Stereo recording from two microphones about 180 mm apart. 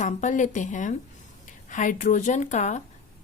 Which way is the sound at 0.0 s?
45° left (ahead or behind).